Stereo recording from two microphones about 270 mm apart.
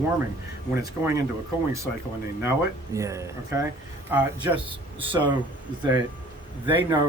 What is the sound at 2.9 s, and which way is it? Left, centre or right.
Speech, centre.